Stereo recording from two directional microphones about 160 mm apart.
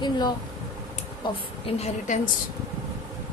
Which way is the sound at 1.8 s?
50° left (ahead or behind).